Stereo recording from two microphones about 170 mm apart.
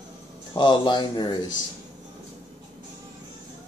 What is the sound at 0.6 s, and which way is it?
Speech, 25° left (ahead or behind).